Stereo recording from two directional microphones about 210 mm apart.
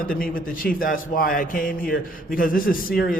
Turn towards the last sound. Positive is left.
turn(degrees=45)  # may be behind; listen again after turning